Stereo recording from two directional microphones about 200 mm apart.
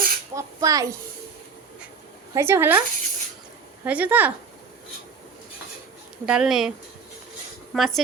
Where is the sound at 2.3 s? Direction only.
10° right (ahead or behind).